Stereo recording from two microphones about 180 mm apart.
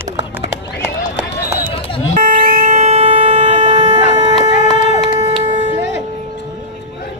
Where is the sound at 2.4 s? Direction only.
45° right (ahead or behind); by 4.0 s 25° right (ahead or behind).